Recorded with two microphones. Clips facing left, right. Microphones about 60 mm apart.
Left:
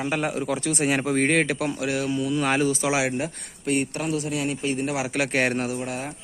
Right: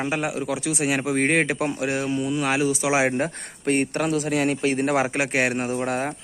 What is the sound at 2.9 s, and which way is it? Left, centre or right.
Speech, right.